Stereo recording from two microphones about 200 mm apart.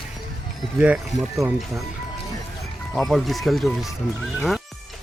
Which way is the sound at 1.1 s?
35° left (ahead or behind).